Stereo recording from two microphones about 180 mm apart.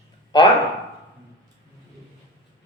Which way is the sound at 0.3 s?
25° left (ahead or behind).